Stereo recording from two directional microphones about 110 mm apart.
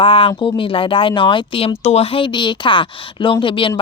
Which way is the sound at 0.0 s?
55° left (ahead or behind).